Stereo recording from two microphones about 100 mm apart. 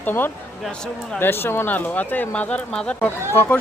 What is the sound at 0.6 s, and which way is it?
Speech, 5° left (ahead or behind).